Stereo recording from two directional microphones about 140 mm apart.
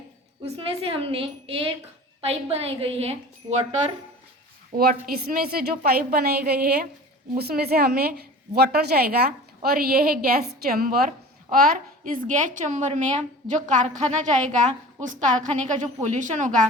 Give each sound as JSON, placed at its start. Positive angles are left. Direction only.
{"t": 0.4, "sound": "a woman's voice", "side_deg": -45}
{"t": 4.8, "sound": "a woman's voice", "side_deg": -90}